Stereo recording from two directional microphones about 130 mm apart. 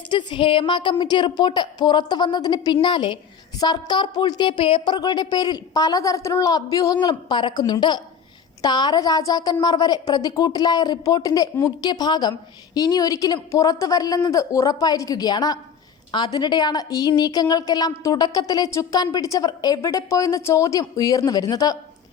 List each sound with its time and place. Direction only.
0.1 s a woman's voice: 35° left (ahead or behind)